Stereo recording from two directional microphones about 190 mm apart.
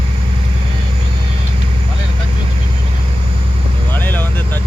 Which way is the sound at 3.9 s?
10° left (ahead or behind).